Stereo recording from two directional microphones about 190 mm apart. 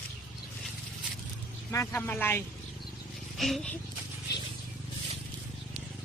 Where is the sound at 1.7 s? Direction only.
15° left (ahead or behind).